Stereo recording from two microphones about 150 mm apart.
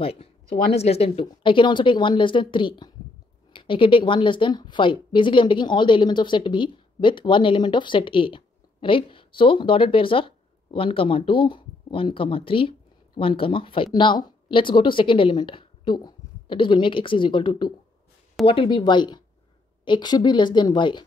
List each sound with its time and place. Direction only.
0.0 s a woman's voice: 40° left (ahead or behind)